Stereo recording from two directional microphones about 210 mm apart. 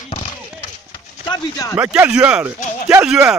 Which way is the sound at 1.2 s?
20° left (ahead or behind).